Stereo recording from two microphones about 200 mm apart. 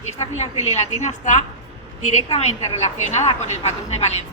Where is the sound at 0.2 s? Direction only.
35° left (ahead or behind).